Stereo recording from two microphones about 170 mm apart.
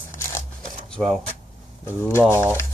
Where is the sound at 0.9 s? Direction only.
5° left (ahead or behind).